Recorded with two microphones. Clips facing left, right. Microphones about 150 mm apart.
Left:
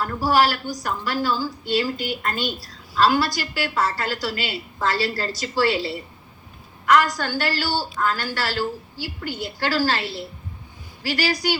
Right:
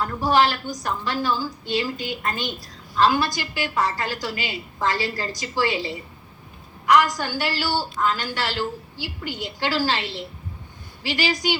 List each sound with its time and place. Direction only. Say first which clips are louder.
0.0 s a woman's voice: even; 20° right (ahead or behind)